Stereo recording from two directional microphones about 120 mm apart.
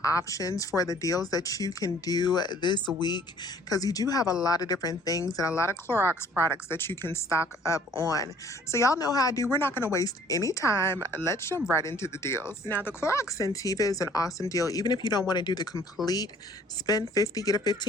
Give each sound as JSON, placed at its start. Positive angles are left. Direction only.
{"t": 0.0, "sound": "a woman's voice", "side_deg": 25}